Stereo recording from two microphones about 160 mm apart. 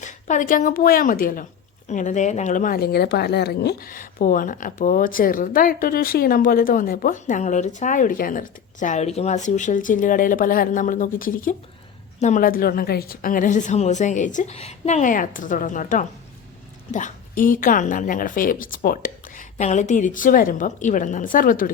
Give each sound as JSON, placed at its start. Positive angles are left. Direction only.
{"t": 0.0, "sound": "a woman's voice", "side_deg": 50}
{"t": 1.9, "sound": "a woman's voice", "side_deg": 50}